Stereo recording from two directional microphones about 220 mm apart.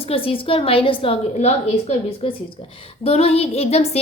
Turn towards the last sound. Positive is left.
turn(degrees=30)  # may be behind; listen again after turning